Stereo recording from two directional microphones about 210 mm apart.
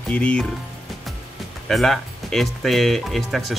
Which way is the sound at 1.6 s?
Centre (ahead or behind).